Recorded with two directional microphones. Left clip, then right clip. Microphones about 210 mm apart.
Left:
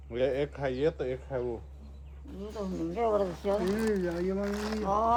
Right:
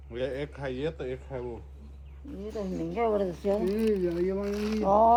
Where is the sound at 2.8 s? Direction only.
25° right (ahead or behind).